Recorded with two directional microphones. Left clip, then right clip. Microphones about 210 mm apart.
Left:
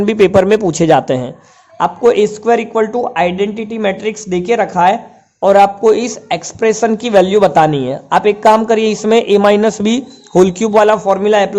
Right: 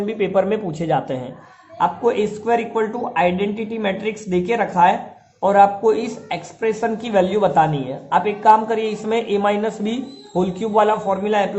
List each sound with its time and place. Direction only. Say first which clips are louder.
0.0 s a man's voice: left 9 dB; 50° left (ahead or behind)